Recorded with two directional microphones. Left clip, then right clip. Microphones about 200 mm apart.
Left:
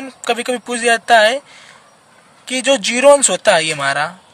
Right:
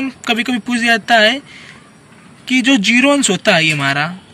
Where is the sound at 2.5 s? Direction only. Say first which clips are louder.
Right 2 dB; 45° left (ahead or behind).